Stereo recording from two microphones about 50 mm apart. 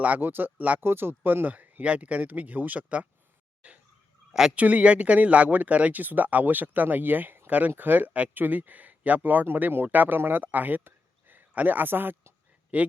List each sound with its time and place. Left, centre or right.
0.2 s speech: right
3.6 s turkey: right
4.3 s speech: centre
4.5 s speech: right
12.7 s speech: right